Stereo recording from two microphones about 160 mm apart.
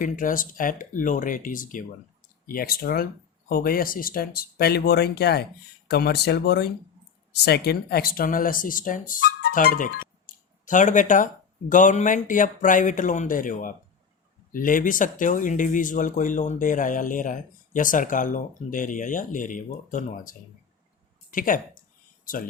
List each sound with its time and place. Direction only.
0.0 s speech: 55° left (ahead or behind)
2.5 s speech: 70° left (ahead or behind)